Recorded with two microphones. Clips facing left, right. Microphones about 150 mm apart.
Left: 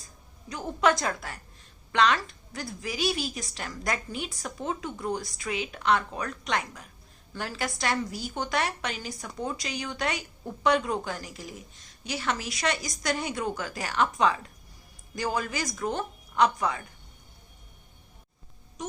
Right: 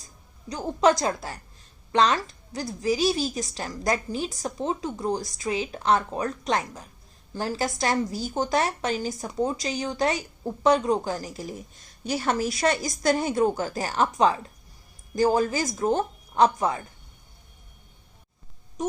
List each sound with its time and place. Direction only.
0.5 s a woman's voice: 35° right (ahead or behind)
12.6 s a woman's voice: 30° right (ahead or behind)
13.1 s a woman's voice: 40° right (ahead or behind)